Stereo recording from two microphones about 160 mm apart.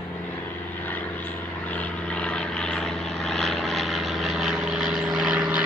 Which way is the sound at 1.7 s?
5° left (ahead or behind).